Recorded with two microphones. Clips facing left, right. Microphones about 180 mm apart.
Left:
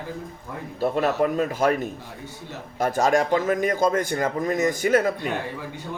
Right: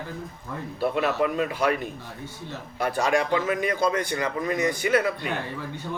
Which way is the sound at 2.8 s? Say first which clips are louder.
Left 3 dB; 45° left (ahead or behind).